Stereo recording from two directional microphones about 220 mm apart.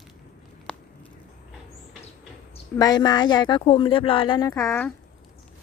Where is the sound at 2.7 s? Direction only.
20° left (ahead or behind).